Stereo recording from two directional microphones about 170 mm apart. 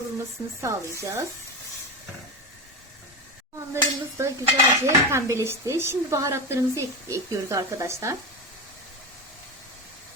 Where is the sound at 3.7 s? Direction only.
15° right (ahead or behind).